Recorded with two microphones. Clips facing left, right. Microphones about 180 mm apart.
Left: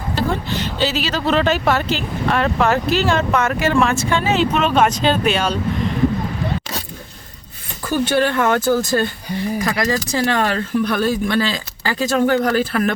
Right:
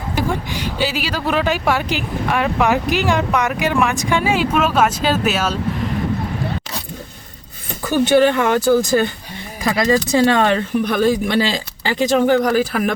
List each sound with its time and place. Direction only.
0.2 s speech: 10° right (ahead or behind)
8.1 s speech: 15° right (ahead or behind)